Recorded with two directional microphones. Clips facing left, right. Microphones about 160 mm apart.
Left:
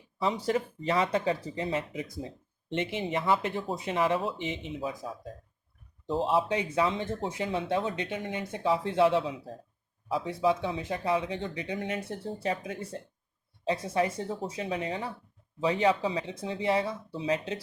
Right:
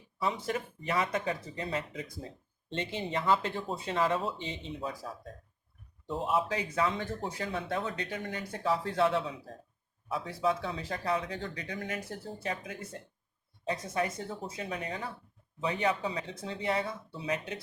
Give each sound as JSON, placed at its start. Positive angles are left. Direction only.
{"t": 0.2, "sound": "speech", "side_deg": 30}
{"t": 6.1, "sound": "speech", "side_deg": 30}